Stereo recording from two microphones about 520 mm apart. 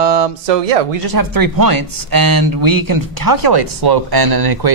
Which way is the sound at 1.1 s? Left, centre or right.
Right.